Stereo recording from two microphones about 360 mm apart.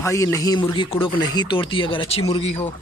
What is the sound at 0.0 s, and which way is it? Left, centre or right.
Speech, centre.